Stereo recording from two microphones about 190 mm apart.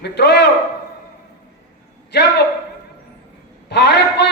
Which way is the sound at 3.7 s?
60° left (ahead or behind).